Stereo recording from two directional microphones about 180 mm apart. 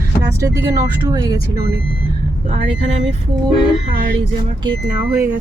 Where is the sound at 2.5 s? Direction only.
35° right (ahead or behind).